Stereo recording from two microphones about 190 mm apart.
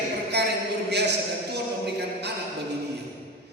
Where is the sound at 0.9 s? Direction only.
60° right (ahead or behind).